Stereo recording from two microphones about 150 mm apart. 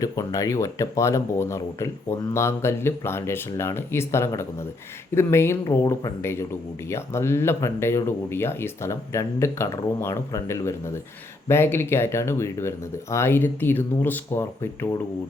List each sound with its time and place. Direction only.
0.0 s speech: 20° left (ahead or behind)